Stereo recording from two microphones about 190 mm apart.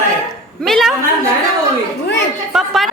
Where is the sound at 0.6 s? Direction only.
Centre (ahead or behind).